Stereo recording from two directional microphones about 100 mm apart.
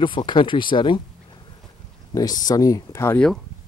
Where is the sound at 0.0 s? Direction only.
50° left (ahead or behind).